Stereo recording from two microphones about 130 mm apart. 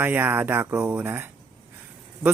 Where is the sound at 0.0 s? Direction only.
15° right (ahead or behind).